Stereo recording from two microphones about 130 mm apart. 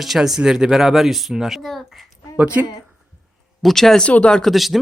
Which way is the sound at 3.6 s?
5° left (ahead or behind).